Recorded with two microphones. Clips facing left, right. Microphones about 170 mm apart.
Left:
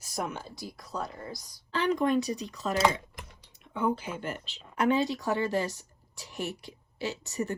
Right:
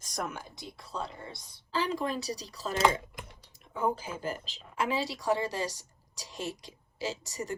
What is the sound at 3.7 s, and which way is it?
Speech, 35° right (ahead or behind).